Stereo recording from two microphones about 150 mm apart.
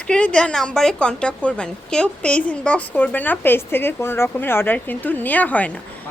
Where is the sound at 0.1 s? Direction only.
10° left (ahead or behind).